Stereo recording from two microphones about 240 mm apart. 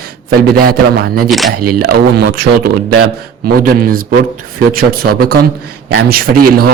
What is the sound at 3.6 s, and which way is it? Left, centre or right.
Speech, right.